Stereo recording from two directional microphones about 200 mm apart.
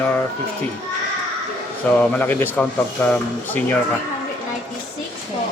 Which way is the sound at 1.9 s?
10° left (ahead or behind).